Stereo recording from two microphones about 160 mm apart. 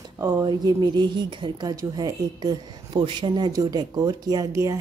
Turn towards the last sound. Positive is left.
turn(degrees=-20)  # may be behind; listen again after turning